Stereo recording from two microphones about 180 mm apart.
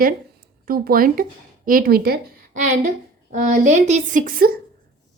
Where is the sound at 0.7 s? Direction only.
55° right (ahead or behind).